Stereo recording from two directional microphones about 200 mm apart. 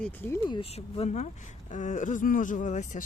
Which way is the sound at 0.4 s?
25° left (ahead or behind).